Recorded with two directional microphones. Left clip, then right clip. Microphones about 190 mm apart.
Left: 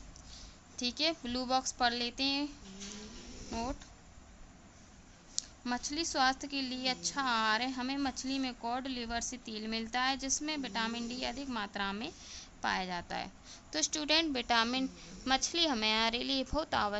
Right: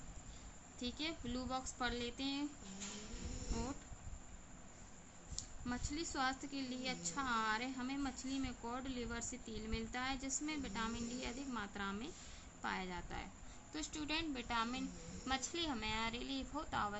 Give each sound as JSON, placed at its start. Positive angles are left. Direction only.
{"t": 0.8, "sound": "a woman's voice", "side_deg": 50}
{"t": 5.6, "sound": "a woman's voice", "side_deg": 45}